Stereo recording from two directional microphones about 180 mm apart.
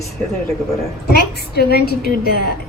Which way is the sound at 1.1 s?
65° left (ahead or behind).